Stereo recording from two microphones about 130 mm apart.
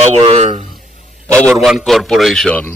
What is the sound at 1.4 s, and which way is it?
A man's voice, 5° left (ahead or behind).